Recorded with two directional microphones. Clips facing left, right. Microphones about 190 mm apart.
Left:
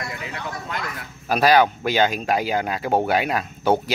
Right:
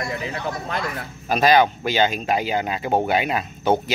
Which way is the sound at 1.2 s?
5° left (ahead or behind).